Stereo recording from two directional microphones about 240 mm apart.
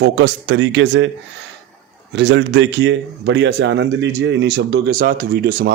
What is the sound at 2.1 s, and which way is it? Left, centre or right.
Speech, right.